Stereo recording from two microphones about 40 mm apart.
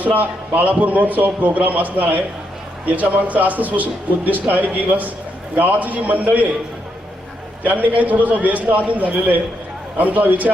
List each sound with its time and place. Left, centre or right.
0.0 s a man's voice: right
7.6 s a man's voice: right